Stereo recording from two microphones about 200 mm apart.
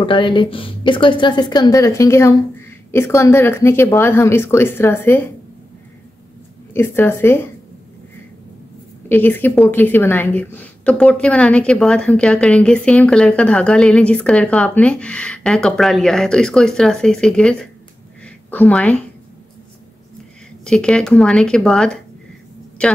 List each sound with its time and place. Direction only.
0.0 s speech: 25° left (ahead or behind)
6.7 s speech: 10° left (ahead or behind)
9.1 s a woman's voice: 10° left (ahead or behind)
18.2 s a sound: 5° left (ahead or behind)
20.6 s a woman's voice: 5° left (ahead or behind)